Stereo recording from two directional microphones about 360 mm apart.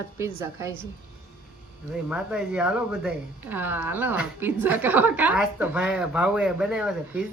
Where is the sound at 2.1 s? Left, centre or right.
Centre.